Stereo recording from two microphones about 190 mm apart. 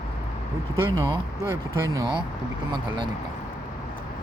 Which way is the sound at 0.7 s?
15° right (ahead or behind).